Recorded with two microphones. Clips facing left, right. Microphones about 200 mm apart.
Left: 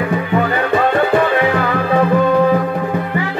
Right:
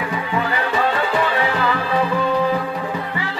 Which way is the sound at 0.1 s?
55° left (ahead or behind).